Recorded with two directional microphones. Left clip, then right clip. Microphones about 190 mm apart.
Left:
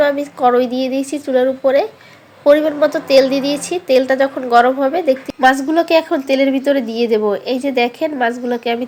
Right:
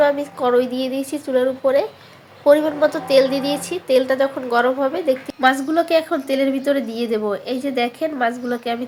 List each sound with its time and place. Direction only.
0.0 s a woman's voice: 15° left (ahead or behind)